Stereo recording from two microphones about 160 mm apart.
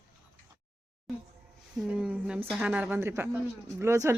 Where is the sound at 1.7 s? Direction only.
5° right (ahead or behind).